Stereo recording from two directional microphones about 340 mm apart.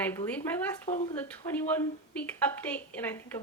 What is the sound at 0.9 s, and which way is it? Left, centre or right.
Speech, centre.